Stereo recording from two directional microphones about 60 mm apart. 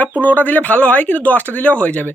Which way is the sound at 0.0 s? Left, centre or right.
Left.